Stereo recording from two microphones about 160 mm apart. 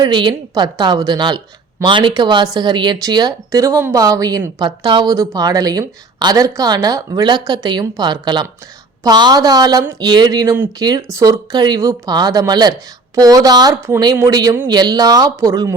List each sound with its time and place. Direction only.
0.0 s speech: 30° right (ahead or behind)